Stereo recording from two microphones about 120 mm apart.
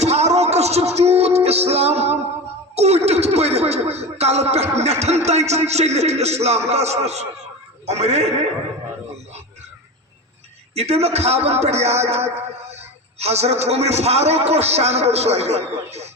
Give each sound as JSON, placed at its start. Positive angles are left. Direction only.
{"t": 0.0, "sound": "music", "side_deg": -65}
{"t": 2.7, "sound": "a man's voice", "side_deg": -65}
{"t": 10.8, "sound": "a man's voice", "side_deg": -65}